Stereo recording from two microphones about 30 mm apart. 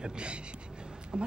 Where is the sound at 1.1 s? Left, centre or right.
Right.